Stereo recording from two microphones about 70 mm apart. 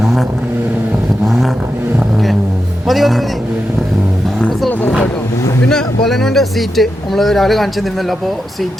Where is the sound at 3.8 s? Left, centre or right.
Centre.